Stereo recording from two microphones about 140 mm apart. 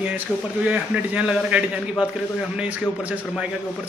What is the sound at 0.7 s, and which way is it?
A man's voice, 10° right (ahead or behind).